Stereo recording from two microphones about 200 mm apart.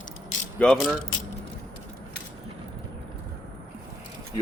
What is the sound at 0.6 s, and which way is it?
Speech, 5° left (ahead or behind).